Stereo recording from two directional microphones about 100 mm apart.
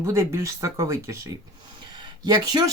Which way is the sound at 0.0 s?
30° right (ahead or behind).